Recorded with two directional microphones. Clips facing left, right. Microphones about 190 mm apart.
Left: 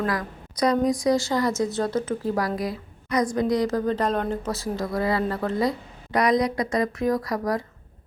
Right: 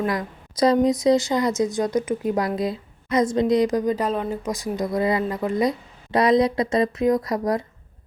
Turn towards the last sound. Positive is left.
turn(degrees=-20)  # may be behind; listen again after turning